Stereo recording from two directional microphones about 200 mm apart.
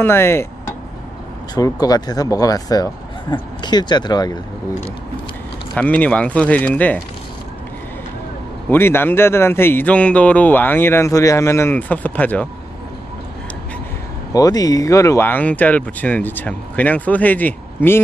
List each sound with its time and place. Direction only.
0.0 s speech: 10° left (ahead or behind)
5.8 s a man's voice: 5° left (ahead or behind)
8.6 s a man's voice: 10° left (ahead or behind)
14.3 s a man's voice: 20° left (ahead or behind)